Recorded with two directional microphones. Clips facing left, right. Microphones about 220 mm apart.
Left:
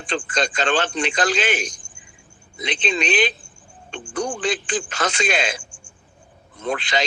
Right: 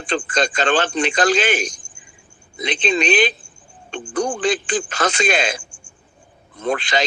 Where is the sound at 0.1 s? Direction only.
45° right (ahead or behind).